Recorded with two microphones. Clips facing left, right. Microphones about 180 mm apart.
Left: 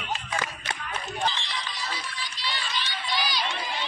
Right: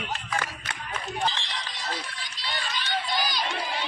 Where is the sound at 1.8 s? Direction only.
50° right (ahead or behind).